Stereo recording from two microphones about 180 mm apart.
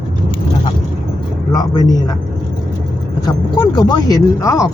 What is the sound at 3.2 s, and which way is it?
Speech, 25° left (ahead or behind).